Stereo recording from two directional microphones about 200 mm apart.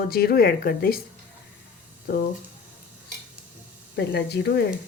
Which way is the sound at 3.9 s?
55° left (ahead or behind).